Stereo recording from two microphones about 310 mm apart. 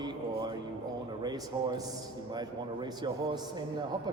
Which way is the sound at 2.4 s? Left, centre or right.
Centre.